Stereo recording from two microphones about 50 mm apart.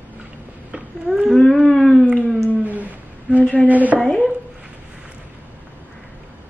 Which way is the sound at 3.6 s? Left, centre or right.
Right.